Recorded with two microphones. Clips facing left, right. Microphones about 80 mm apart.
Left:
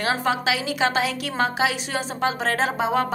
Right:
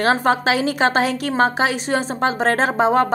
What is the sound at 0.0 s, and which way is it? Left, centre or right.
A woman's voice, right.